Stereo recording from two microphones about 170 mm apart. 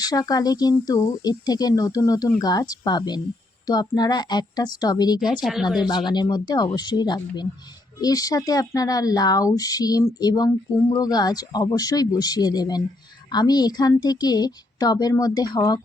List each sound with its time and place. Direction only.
0.0 s speech: 20° left (ahead or behind)
5.4 s speech: centre (ahead or behind)
6.1 s speech: 25° left (ahead or behind)